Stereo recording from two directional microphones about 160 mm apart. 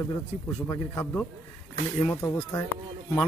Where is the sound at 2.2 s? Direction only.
15° left (ahead or behind).